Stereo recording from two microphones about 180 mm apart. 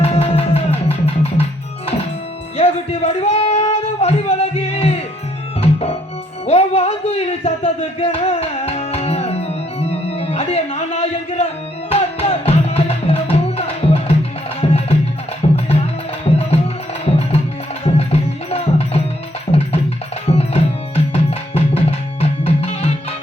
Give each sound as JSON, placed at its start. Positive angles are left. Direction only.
{"t": 0.0, "sound": "music", "side_deg": 35}
{"t": 2.6, "sound": "a sound", "side_deg": 35}
{"t": 5.6, "sound": "music", "side_deg": 35}
{"t": 17.8, "sound": "music", "side_deg": 35}
{"t": 20.2, "sound": "tabla", "side_deg": 35}